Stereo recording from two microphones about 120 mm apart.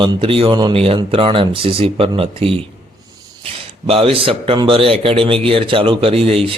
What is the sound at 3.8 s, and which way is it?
Speech, 50° right (ahead or behind).